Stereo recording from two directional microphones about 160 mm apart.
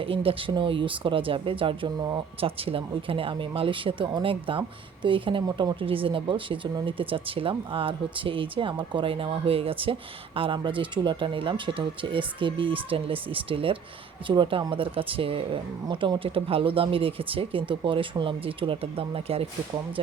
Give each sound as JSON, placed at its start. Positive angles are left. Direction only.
{"t": 0.0, "sound": "speech", "side_deg": -35}